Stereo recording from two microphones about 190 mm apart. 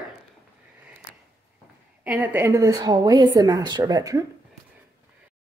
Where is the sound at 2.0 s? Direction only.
10° right (ahead or behind).